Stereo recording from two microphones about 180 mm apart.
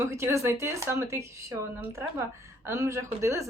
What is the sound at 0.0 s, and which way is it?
Speech, 15° right (ahead or behind).